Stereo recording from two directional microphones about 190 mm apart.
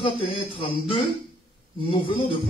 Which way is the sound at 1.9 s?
25° left (ahead or behind).